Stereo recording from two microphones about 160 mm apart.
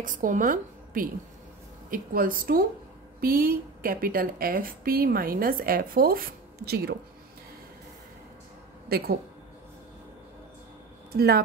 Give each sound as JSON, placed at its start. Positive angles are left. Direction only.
{"t": 0.0, "sound": "a woman's voice", "side_deg": -55}
{"t": 8.8, "sound": "speech", "side_deg": -75}
{"t": 11.1, "sound": "speech", "side_deg": -75}